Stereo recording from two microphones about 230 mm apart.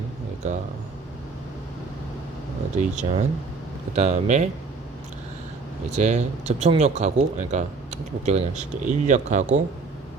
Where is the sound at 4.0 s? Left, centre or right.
Right.